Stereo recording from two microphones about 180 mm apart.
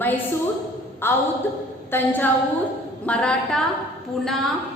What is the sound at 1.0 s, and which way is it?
A woman's voice, 10° left (ahead or behind).